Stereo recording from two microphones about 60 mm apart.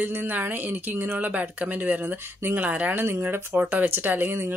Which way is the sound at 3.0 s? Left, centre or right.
Right.